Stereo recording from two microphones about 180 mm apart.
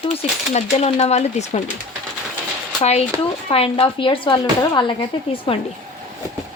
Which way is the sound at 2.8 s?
35° left (ahead or behind).